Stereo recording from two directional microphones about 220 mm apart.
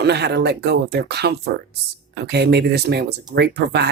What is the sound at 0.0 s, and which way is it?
Speech, 50° right (ahead or behind).